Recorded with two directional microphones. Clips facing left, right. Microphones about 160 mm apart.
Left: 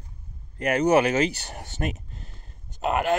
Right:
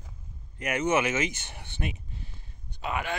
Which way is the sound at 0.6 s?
35° left (ahead or behind).